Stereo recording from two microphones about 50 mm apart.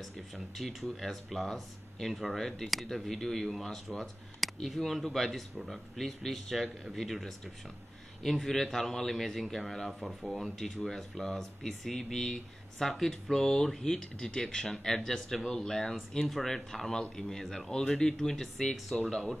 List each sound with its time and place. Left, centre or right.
0.6 s a man's voice: centre